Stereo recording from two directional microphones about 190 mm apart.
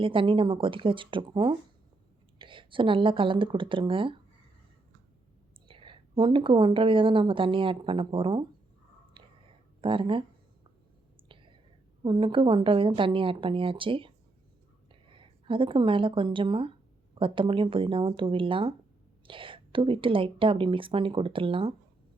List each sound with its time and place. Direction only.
0.0 s a woman's voice: 25° right (ahead or behind)
5.6 s a woman's voice: 25° right (ahead or behind)
9.2 s whispering: 25° right (ahead or behind)
9.8 s a woman's voice: 25° right (ahead or behind)
11.3 s whispering: 25° right (ahead or behind)
12.0 s a woman's voice: 25° right (ahead or behind)